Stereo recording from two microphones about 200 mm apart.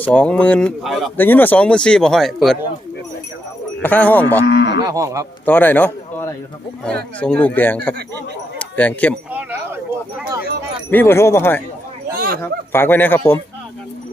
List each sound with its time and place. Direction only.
0.0 s a man's voice: 5° left (ahead or behind)
1.1 s speech: 10° left (ahead or behind)
3.8 s a man's voice: 10° left (ahead or behind)
4.4 s cattle: 60° left (ahead or behind)
4.9 s a man's voice: 15° right (ahead or behind)
5.5 s a man's voice: 10° left (ahead or behind)
8.5 s a sound: 10° left (ahead or behind)
10.2 s a man's voice: 15° right (ahead or behind)
10.9 s a man's voice: 10° left (ahead or behind)
12.1 s speech: 45° right (ahead or behind)
12.4 s a man's voice: 10° left (ahead or behind)